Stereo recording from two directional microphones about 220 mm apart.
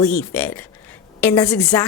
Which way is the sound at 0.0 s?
5° left (ahead or behind).